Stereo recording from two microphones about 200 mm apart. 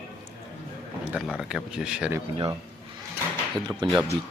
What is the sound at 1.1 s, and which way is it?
Speech, centre (ahead or behind).